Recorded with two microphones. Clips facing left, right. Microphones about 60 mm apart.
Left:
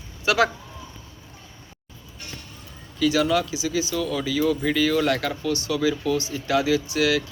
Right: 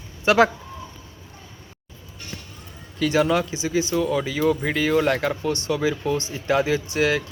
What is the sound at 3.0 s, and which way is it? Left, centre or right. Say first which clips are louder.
Speech: right 1 dB; right.